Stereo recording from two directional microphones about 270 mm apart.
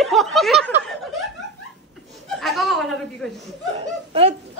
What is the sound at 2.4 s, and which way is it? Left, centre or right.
Speech, centre.